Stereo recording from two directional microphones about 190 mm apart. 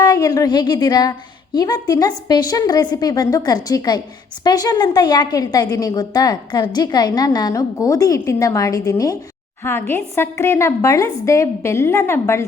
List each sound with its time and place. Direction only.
0.0 s a woman's voice: 20° left (ahead or behind)